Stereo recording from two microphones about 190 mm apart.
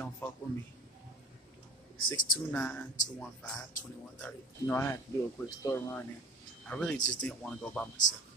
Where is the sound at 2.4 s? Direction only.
10° left (ahead or behind).